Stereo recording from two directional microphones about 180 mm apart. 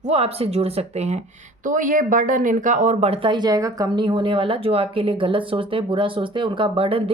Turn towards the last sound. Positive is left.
turn(degrees=-30)  # may be behind; listen again after turning